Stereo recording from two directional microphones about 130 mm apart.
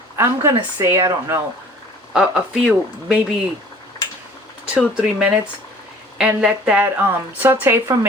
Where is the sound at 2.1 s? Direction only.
5° right (ahead or behind).